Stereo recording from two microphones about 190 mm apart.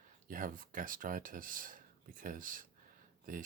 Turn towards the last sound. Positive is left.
turn(degrees=-45)  # may be behind; listen again after turning